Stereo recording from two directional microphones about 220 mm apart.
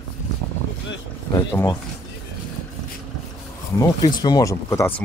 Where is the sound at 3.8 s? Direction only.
20° left (ahead or behind).